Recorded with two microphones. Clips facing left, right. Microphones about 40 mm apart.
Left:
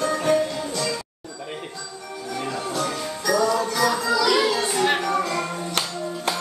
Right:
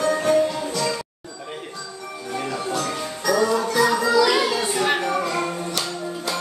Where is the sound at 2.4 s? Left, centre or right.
Centre.